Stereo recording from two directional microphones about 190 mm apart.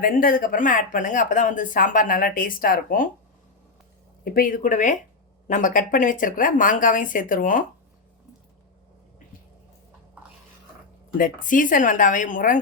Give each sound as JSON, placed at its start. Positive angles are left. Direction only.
{"t": 0.0, "sound": "speech", "side_deg": 45}
{"t": 4.2, "sound": "speech", "side_deg": 50}
{"t": 11.2, "sound": "speech", "side_deg": 45}